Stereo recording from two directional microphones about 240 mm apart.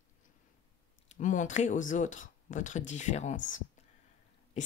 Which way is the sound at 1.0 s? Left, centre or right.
Left.